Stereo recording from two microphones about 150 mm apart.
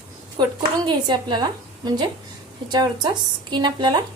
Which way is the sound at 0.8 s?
30° right (ahead or behind).